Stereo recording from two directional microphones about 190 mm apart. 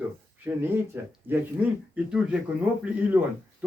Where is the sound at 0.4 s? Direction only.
5° right (ahead or behind).